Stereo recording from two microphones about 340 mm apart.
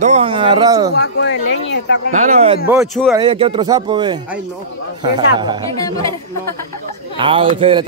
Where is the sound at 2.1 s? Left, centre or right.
Centre.